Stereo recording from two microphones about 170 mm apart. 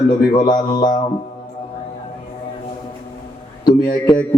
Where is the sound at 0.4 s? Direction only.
25° left (ahead or behind).